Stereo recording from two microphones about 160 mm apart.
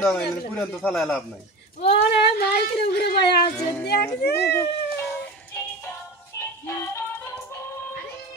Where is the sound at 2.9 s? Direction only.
90° left.